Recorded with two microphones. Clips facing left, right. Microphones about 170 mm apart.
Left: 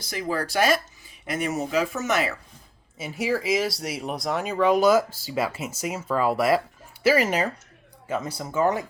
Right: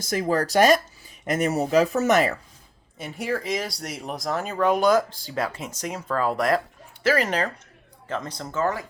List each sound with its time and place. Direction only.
0.0 s speech: 45° right (ahead or behind)
3.0 s speech: 5° left (ahead or behind)